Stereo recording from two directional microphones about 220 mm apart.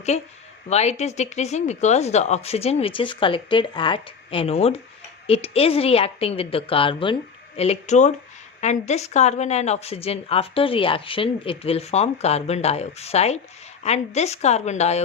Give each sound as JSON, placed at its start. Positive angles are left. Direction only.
{"t": 0.1, "sound": "a woman's voice", "side_deg": 30}